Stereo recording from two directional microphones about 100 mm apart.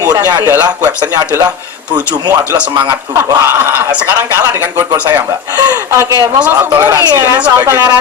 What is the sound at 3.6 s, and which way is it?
Speech, 20° right (ahead or behind).